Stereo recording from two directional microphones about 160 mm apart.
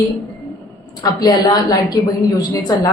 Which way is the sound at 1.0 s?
25° left (ahead or behind).